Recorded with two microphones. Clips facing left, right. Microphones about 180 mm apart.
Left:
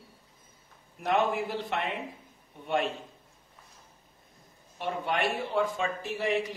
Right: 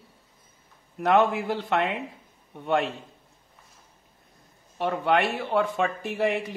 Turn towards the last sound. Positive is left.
turn(degrees=-55)  # may be behind; listen again after turning